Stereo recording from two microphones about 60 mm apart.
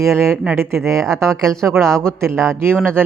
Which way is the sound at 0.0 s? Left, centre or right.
Right.